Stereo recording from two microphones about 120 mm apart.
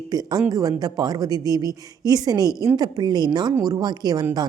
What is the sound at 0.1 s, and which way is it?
A woman's voice, 35° right (ahead or behind).